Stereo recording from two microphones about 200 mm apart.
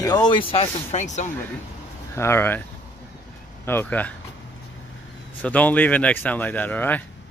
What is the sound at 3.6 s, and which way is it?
Speech, 10° left (ahead or behind).